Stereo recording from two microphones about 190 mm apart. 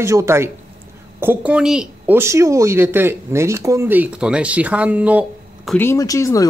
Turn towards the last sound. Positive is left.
turn(degrees=15)  # may be behind; listen again after turning